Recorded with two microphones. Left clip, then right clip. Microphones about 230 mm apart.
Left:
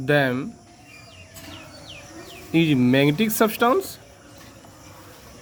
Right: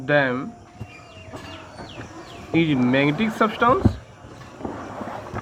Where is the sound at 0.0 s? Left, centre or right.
Left.